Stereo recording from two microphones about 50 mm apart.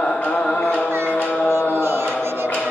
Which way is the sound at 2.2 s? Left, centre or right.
Right.